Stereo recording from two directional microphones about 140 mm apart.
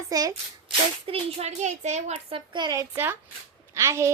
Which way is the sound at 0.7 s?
40° right (ahead or behind).